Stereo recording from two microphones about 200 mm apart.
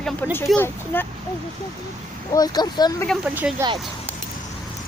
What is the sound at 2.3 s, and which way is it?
Speech, 20° left (ahead or behind).